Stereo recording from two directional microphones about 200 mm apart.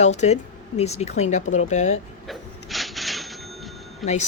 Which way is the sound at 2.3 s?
Centre (ahead or behind).